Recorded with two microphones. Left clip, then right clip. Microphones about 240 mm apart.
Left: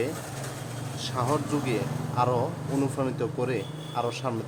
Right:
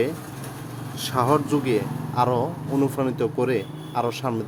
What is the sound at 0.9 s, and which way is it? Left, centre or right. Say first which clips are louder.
Speech: right 7 dB; right.